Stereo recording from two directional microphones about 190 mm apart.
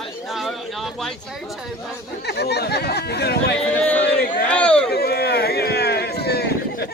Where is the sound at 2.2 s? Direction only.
60° left (ahead or behind).